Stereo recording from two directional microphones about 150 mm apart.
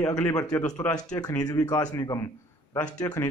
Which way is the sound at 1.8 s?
25° left (ahead or behind).